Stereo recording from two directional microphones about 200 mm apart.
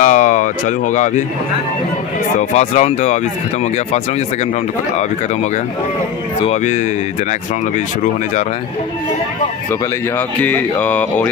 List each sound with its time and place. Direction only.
0.0 s a sound: 40° left (ahead or behind)
2.5 s speech: 35° left (ahead or behind)
6.4 s speech: 35° left (ahead or behind)
9.7 s speech: 10° left (ahead or behind)